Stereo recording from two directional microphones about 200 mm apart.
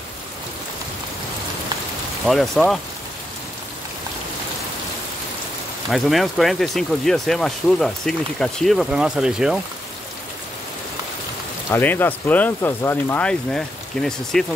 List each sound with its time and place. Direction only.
2.2 s speech: centre (ahead or behind)
5.9 s speech: centre (ahead or behind)
11.7 s speech: 10° left (ahead or behind)